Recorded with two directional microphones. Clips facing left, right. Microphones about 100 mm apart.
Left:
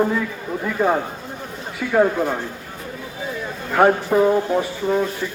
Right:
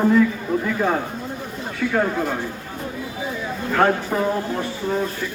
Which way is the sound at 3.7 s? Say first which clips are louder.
Left 4 dB; 10° left (ahead or behind).